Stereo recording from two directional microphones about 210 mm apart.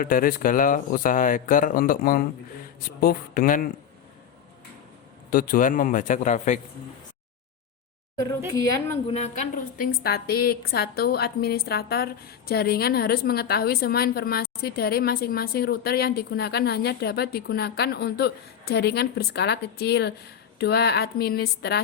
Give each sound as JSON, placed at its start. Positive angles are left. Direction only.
{"t": 0.0, "sound": "a woman's voice", "side_deg": 40}
{"t": 5.3, "sound": "speech", "side_deg": 40}
{"t": 9.0, "sound": "a woman's voice", "side_deg": 30}